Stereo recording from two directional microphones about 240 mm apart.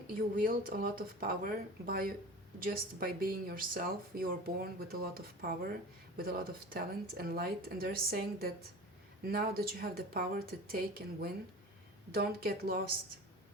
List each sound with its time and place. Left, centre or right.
0.1 s speech: right